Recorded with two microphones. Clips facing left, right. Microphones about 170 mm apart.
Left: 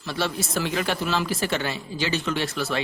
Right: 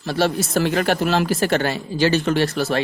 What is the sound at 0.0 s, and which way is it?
Speech, 45° right (ahead or behind).